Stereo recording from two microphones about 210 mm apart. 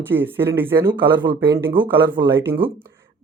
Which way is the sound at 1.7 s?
20° right (ahead or behind).